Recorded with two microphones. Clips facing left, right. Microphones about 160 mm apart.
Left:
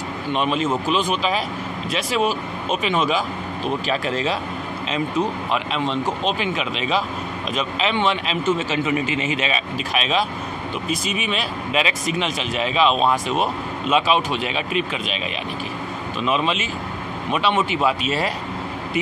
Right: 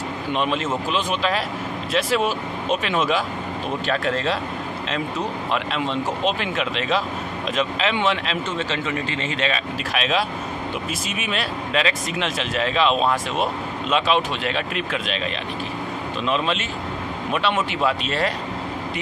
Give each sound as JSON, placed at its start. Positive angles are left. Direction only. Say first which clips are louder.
{"t": 0.3, "sound": "speech", "louder": "left 2 dB", "side_deg": 0}
{"t": 5.5, "sound": "speech", "louder": "left 1 dB", "side_deg": 0}
{"t": 16.3, "sound": "speech", "louder": "left 2 dB", "side_deg": 5}